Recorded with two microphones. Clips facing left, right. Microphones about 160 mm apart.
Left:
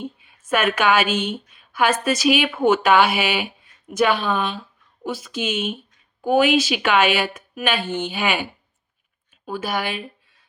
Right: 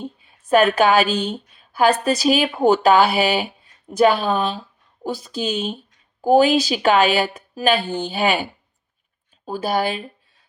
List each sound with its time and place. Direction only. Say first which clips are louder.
0.0 s a woman's voice: even; 35° right (ahead or behind)
9.5 s a woman's voice: right 4 dB; 35° right (ahead or behind)